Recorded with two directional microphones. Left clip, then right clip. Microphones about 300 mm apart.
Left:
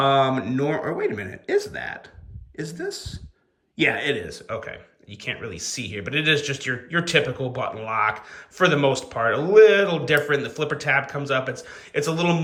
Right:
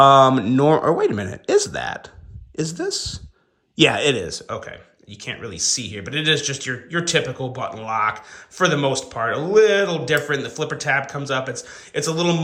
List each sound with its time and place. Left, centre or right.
0.0 s speech: centre